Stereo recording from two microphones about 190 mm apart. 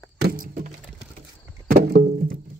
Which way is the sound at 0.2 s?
50° right (ahead or behind).